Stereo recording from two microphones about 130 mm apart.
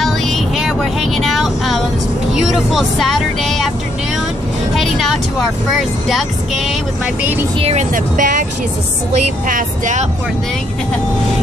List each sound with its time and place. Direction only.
0.0 s vehicle: centre (ahead or behind)
2.3 s speech: centre (ahead or behind)
4.7 s music: centre (ahead or behind)
6.0 s speech: centre (ahead or behind)
7.5 s speech: 50° right (ahead or behind)
7.9 s speech: 90° right
9.5 s speech: 80° right